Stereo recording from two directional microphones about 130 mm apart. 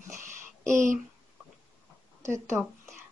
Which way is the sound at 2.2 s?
20° right (ahead or behind).